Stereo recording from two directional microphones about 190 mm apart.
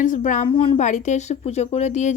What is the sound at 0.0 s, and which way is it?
Speech, 45° left (ahead or behind).